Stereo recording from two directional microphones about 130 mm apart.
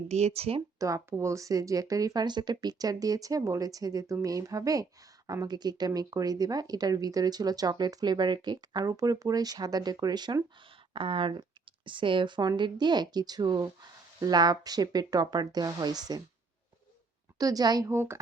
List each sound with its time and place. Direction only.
0.1 s speech: 55° right (ahead or behind)
0.8 s speech: 25° right (ahead or behind)
17.3 s speech: 30° right (ahead or behind)